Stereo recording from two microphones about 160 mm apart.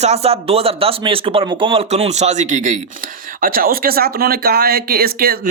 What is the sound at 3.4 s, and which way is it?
Speech, 65° right (ahead or behind).